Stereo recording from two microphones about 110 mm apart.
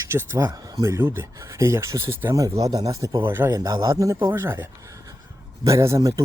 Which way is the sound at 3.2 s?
20° right (ahead or behind).